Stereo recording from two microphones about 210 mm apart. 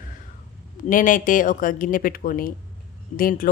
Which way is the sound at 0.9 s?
40° left (ahead or behind).